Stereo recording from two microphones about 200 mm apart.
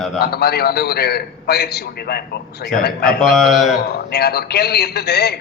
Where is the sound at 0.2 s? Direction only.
50° left (ahead or behind).